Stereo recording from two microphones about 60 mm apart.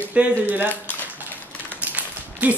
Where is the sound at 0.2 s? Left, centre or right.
Right.